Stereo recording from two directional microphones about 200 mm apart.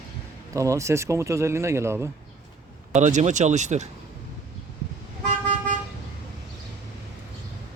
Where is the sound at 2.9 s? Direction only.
35° right (ahead or behind).